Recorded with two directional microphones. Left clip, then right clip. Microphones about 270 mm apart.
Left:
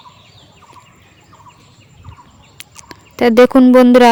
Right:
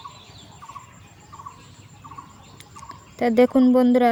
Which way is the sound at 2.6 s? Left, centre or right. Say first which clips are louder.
Left 5 dB; left.